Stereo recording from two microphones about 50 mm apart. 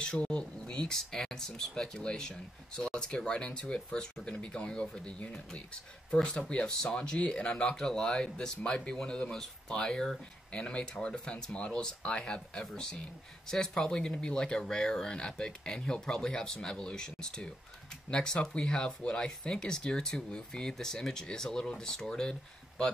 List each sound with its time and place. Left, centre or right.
0.0 s speech: left